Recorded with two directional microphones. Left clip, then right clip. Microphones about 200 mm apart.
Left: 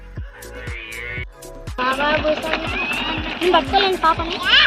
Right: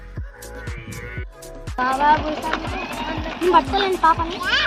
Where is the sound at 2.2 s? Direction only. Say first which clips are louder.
Left 6 dB; 30° left (ahead or behind).